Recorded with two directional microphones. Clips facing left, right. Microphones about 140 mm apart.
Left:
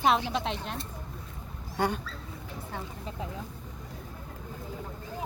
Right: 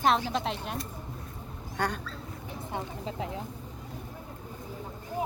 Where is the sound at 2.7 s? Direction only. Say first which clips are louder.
Right 5 dB; 20° right (ahead or behind).